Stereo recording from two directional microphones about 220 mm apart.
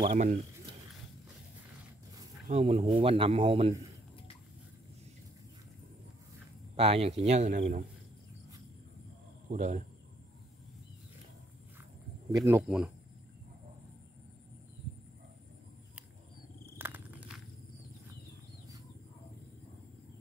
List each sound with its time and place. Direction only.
0.0 s a man's voice: 30° right (ahead or behind)
2.4 s speech: 30° right (ahead or behind)
6.8 s a man's voice: 25° right (ahead or behind)
9.5 s a man's voice: 35° right (ahead or behind)
12.3 s speech: 15° right (ahead or behind)
16.7 s a sound: 10° right (ahead or behind)